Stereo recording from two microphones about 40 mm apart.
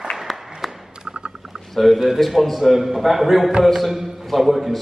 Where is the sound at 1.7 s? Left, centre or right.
Centre.